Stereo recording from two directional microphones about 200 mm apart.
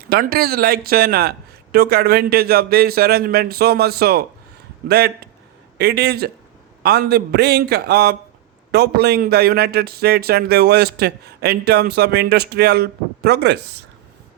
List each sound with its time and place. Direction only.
0.1 s speech: 50° right (ahead or behind)